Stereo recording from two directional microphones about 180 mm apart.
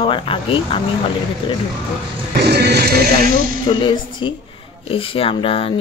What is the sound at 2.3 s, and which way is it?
Music, 65° right (ahead or behind).